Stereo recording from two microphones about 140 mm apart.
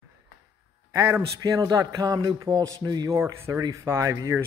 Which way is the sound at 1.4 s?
30° right (ahead or behind).